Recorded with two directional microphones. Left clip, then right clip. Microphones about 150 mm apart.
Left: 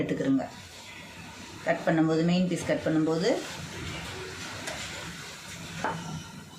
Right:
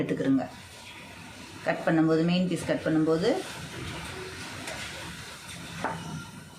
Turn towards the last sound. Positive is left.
turn(degrees=-5)  # may be behind; listen again after turning